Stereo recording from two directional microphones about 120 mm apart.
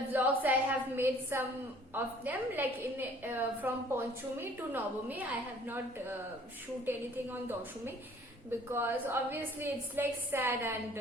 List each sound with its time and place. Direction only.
0.1 s a woman's voice: 15° right (ahead or behind)